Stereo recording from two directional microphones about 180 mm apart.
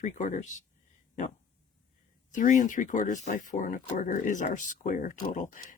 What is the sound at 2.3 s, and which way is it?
Speech, 45° left (ahead or behind).